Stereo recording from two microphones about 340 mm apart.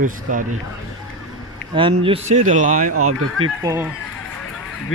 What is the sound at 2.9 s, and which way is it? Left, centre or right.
Speech, right.